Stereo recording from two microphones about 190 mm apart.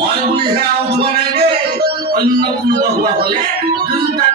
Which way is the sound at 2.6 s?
50° right (ahead or behind).